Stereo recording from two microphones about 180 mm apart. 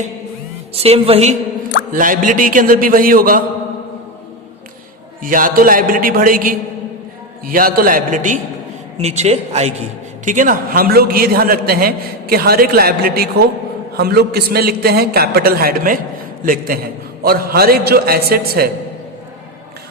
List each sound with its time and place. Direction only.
0.7 s a woman's voice: 35° right (ahead or behind)
1.9 s a man's voice: 50° right (ahead or behind)
5.2 s a man's voice: 50° right (ahead or behind)